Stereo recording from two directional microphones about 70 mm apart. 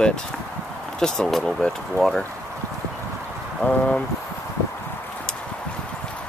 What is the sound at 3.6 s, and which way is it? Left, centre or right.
Speech, centre.